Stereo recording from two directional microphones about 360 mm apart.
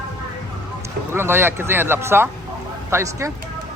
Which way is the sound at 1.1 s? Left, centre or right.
Centre.